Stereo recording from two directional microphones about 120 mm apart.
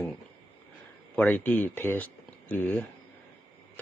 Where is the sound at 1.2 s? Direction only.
15° left (ahead or behind).